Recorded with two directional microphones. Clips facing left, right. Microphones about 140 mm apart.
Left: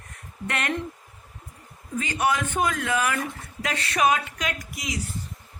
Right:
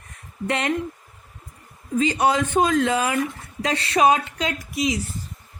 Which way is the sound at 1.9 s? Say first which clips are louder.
Right 5 dB; 20° right (ahead or behind).